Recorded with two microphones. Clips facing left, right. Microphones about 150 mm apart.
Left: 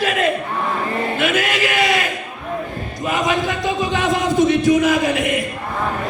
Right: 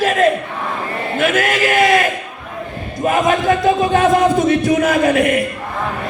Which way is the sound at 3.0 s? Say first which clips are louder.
Right 5 dB; 50° right (ahead or behind).